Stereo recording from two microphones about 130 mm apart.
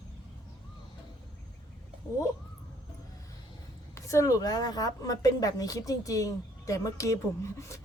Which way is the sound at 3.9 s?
25° left (ahead or behind).